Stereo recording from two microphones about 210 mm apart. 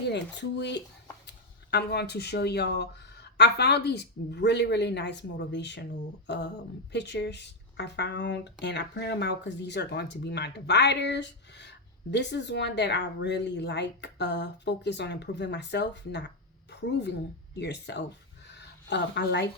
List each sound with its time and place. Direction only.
0.1 s speech: 55° left (ahead or behind)